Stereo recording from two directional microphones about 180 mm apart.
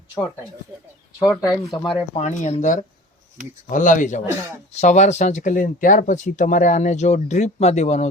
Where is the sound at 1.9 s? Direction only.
40° left (ahead or behind).